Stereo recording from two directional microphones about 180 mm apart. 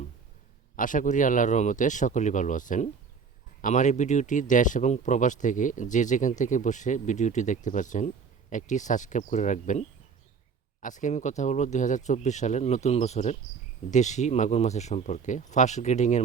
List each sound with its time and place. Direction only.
0.8 s speech: 45° left (ahead or behind)